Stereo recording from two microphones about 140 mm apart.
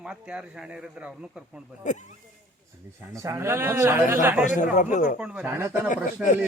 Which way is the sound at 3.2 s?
20° right (ahead or behind).